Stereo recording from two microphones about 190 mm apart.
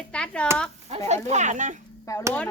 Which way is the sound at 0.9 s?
35° right (ahead or behind).